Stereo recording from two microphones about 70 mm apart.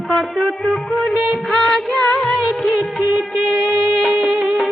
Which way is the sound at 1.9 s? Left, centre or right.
Centre.